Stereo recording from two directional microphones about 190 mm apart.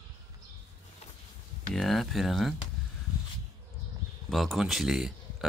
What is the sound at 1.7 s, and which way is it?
Speech, centre (ahead or behind).